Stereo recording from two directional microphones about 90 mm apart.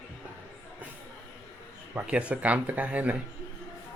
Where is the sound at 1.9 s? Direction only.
15° right (ahead or behind).